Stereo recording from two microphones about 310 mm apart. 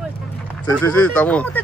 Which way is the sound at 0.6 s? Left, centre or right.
Centre.